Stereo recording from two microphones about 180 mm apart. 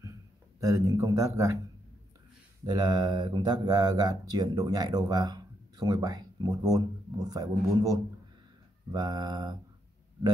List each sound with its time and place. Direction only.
0.6 s speech: 15° right (ahead or behind)
2.6 s speech: 20° right (ahead or behind)